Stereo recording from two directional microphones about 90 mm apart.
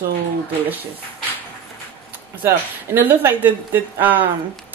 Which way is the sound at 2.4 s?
25° right (ahead or behind).